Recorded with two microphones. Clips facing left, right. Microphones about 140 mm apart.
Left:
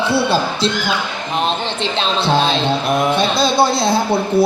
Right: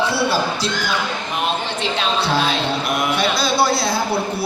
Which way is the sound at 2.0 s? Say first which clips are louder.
Left 4 dB; 25° left (ahead or behind).